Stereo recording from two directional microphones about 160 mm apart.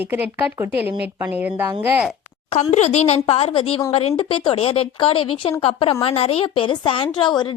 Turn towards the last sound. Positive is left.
turn(degrees=30)  # may be behind; listen again after turning